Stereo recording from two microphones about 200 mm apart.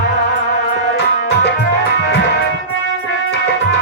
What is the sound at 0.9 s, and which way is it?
Music, 55° left (ahead or behind).